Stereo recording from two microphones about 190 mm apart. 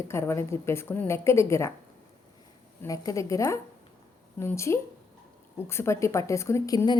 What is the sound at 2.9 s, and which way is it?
A woman's voice, 15° left (ahead or behind).